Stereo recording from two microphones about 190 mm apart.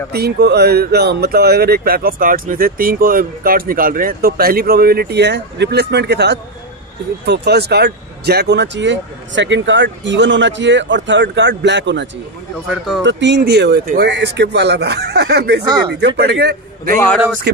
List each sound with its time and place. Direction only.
0.1 s speech: 55° right (ahead or behind)